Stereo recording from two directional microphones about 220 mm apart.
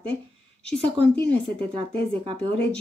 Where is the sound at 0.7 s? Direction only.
25° right (ahead or behind).